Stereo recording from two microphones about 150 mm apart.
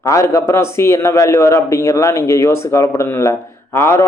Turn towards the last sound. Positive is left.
turn(degrees=15)  # may be behind; listen again after turning